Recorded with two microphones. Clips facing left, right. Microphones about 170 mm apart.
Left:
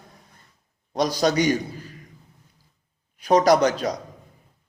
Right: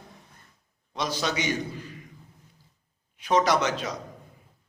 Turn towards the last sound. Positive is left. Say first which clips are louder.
# left 7 dB
turn(degrees=35)  # may be behind; listen again after turning